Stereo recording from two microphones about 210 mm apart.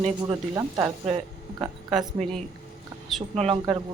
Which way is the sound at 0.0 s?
20° right (ahead or behind).